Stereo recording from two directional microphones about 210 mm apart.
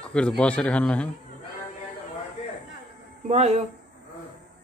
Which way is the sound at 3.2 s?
30° right (ahead or behind).